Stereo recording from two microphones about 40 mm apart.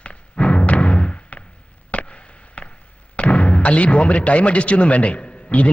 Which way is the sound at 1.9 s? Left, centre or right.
Left.